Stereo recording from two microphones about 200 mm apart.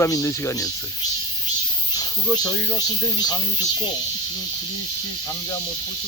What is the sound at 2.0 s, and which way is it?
Speech, 20° left (ahead or behind).